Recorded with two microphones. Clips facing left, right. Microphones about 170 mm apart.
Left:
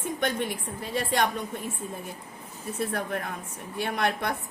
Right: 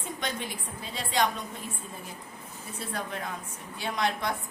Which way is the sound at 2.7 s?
55° left (ahead or behind).